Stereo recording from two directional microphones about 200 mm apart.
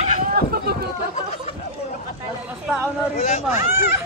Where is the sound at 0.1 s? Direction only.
45° right (ahead or behind).